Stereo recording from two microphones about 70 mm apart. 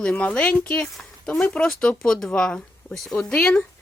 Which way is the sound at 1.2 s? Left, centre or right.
Centre.